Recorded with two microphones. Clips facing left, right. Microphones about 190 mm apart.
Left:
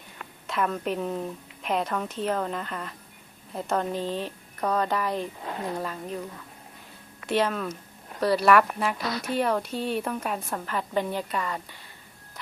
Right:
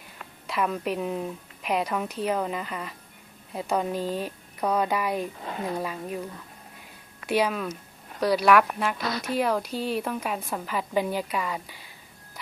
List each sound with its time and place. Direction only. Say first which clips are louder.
0.4 s a woman's voice: even; 5° right (ahead or behind)
7.3 s a woman's voice: even; 5° right (ahead or behind)